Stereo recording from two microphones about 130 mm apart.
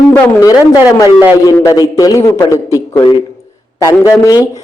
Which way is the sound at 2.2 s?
20° left (ahead or behind).